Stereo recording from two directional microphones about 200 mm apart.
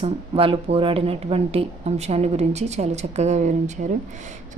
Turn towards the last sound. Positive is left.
turn(degrees=-35)  # may be behind; listen again after turning